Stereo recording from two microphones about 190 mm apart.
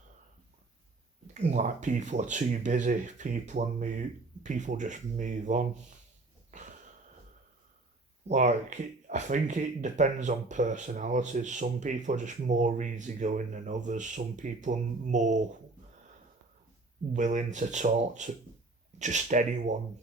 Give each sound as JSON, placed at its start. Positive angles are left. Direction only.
{"t": 1.3, "sound": "speech", "side_deg": -40}
{"t": 6.5, "sound": "a sound", "side_deg": -40}
{"t": 8.3, "sound": "speech", "side_deg": -40}
{"t": 17.2, "sound": "speech", "side_deg": -40}